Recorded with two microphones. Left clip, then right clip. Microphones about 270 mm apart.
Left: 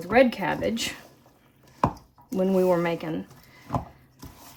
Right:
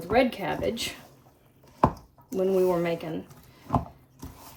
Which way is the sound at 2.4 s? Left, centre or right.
Left.